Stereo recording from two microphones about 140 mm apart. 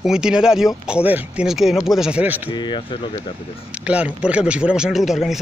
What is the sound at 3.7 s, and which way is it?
Speech, 10° right (ahead or behind).